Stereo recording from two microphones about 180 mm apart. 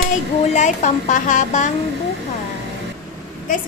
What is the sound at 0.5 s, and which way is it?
A woman's voice, 45° left (ahead or behind).